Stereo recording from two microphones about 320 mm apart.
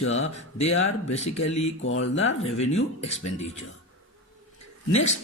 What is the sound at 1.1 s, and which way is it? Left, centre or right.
Speech, centre.